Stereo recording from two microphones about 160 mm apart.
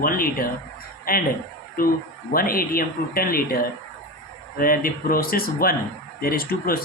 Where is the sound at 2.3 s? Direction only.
65° left (ahead or behind).